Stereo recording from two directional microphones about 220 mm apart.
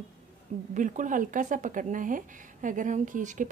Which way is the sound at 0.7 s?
35° right (ahead or behind).